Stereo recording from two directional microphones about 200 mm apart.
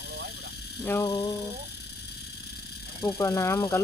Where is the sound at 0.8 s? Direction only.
10° left (ahead or behind).